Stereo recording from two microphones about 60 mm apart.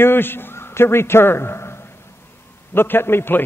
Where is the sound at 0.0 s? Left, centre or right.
Left.